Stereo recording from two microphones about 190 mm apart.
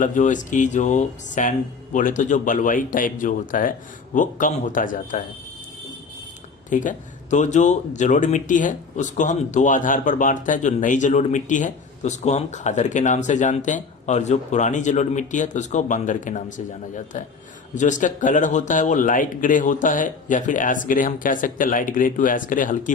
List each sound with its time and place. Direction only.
0.0 s speech: 40° left (ahead or behind)
6.7 s speech: 40° left (ahead or behind)